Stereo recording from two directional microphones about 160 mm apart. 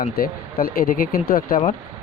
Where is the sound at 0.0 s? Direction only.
65° left (ahead or behind).